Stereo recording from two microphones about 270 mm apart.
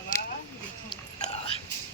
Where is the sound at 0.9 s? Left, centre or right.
Centre.